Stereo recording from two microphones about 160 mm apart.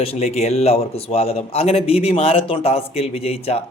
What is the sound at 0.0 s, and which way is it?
A man's voice, 40° left (ahead or behind).